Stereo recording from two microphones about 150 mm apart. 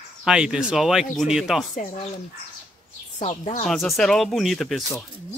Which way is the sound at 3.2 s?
50° left (ahead or behind).